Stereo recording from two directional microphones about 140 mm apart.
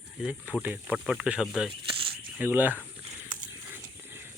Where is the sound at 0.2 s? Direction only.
5° right (ahead or behind).